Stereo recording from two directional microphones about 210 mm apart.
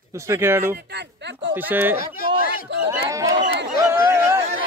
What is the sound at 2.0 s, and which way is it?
Speech, 45° left (ahead or behind).